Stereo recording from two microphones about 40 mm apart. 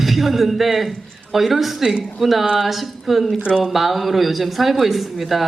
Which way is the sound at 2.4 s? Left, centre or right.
Centre.